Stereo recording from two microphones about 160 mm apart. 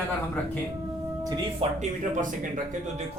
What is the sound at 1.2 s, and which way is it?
Speech, 25° right (ahead or behind).